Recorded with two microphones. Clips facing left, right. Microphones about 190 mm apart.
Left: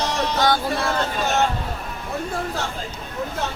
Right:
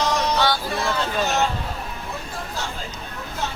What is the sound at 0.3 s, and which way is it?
Vehicle, 50° left (ahead or behind).